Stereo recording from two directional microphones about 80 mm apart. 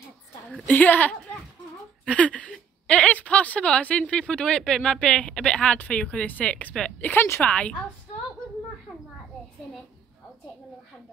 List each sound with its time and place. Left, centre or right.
0.7 s a woman's voice: left
7.1 s a woman's voice: left
7.4 s speech: centre